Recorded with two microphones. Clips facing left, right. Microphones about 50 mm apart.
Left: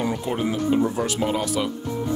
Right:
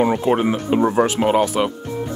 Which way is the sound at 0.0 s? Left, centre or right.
Right.